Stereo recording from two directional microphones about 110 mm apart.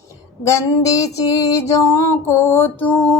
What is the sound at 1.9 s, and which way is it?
Mantra, 25° left (ahead or behind).